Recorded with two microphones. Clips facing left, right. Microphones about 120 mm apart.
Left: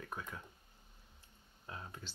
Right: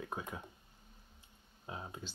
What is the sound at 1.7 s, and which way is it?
Speech, 20° right (ahead or behind).